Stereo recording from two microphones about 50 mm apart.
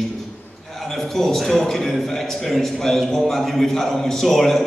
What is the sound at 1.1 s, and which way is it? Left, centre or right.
A man's voice, centre.